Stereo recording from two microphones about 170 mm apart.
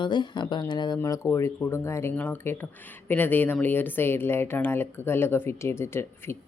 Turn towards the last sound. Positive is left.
turn(degrees=15)  # may be behind; listen again after turning